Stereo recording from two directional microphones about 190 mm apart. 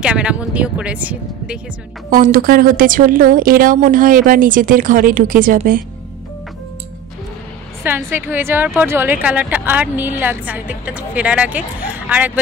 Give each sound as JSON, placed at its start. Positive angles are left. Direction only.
{"t": 0.0, "sound": "speech", "side_deg": -5}
{"t": 2.0, "sound": "a woman's voice", "side_deg": -45}
{"t": 7.8, "sound": "speech", "side_deg": -10}